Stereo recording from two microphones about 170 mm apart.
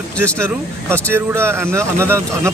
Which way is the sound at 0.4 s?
15° right (ahead or behind).